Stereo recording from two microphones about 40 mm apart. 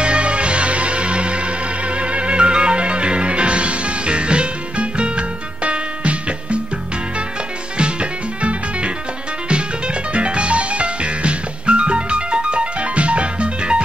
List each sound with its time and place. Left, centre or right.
0.0 s music: right
7.7 s music: right